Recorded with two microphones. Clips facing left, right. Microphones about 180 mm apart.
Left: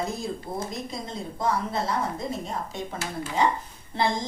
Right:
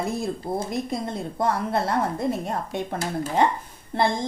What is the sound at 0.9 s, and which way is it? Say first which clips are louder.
A woman's voice: right 6 dB; 60° right (ahead or behind).